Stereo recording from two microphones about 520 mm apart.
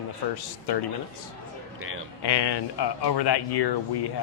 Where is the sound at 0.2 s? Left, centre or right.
Left.